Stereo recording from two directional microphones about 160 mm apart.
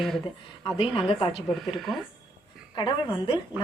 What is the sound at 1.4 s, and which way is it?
Speech, centre (ahead or behind).